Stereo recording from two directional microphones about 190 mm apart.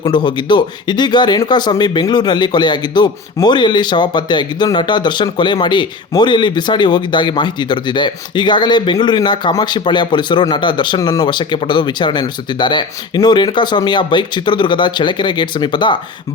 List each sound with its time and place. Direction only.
0.0 s speech: 25° left (ahead or behind)